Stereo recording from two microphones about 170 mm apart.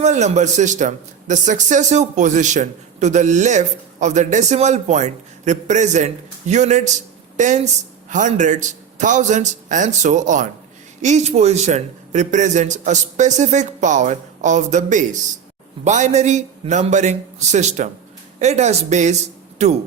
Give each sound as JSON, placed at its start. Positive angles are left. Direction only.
{"t": 0.0, "sound": "a man's voice", "side_deg": -40}